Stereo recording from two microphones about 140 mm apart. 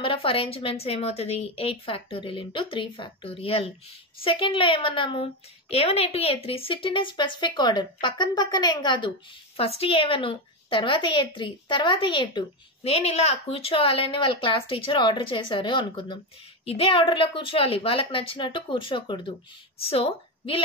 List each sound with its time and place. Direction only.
0.0 s a woman's voice: 40° left (ahead or behind)